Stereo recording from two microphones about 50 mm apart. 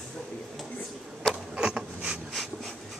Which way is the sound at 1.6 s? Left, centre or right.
Centre.